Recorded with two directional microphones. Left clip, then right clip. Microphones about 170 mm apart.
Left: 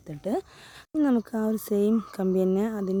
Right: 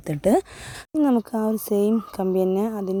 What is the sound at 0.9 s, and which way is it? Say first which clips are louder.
Speech: right 4 dB; 5° right (ahead or behind).